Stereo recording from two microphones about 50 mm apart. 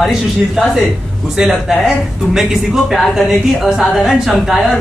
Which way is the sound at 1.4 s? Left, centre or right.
Centre.